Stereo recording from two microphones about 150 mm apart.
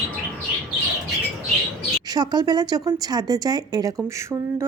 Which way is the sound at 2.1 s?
30° right (ahead or behind).